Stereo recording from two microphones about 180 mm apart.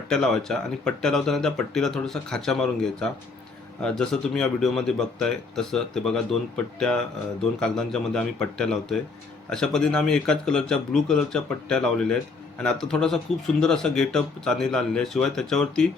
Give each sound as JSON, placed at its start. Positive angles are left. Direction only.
{"t": 0.1, "sound": "a man's voice", "side_deg": 5}